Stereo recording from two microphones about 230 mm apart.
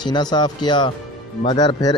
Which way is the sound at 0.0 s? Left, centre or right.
Centre.